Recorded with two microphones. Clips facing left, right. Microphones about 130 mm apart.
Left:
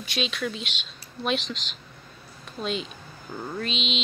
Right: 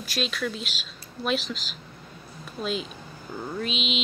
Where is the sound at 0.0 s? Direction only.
Centre (ahead or behind).